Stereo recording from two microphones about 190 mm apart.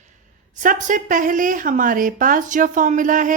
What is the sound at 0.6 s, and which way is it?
Speech, 45° right (ahead or behind).